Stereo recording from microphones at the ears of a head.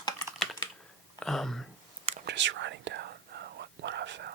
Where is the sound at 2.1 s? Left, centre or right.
Right.